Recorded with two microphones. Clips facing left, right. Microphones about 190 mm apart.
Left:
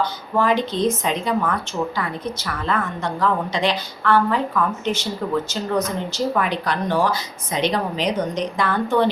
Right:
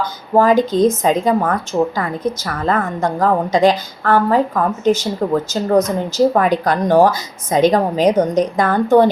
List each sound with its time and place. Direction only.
0.3 s a woman's voice: 45° right (ahead or behind)